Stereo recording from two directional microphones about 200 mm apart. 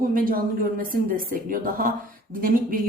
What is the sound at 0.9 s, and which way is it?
Speech, 45° right (ahead or behind).